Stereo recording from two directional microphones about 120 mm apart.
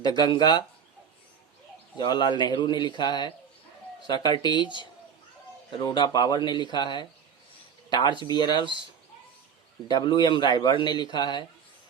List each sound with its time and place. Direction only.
0.0 s a man's voice: 35° left (ahead or behind)
2.0 s a man's voice: 40° left (ahead or behind)
9.9 s a man's voice: 35° left (ahead or behind)